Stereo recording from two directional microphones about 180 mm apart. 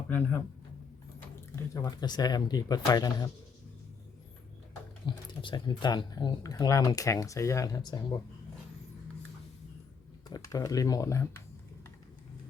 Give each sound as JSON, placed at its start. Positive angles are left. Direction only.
{"t": 1.5, "sound": "speech", "side_deg": 20}
{"t": 5.0, "sound": "speech", "side_deg": 25}
{"t": 10.2, "sound": "speech", "side_deg": 20}